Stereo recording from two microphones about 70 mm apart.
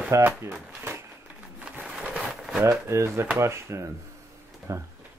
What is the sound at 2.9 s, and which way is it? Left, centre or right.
Speech, right.